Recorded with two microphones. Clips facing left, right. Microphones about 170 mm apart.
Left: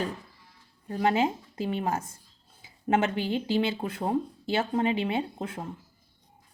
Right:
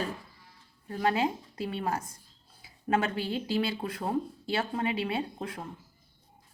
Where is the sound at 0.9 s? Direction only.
20° left (ahead or behind).